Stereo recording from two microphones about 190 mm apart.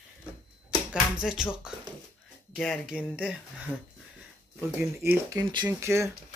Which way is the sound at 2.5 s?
Centre (ahead or behind).